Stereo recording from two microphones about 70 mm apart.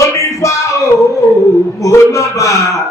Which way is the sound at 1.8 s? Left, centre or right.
Left.